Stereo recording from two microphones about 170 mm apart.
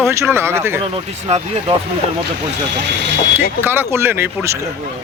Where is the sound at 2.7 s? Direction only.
90° right.